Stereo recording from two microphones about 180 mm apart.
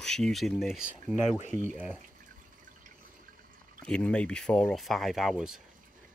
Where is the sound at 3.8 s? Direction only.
5° left (ahead or behind).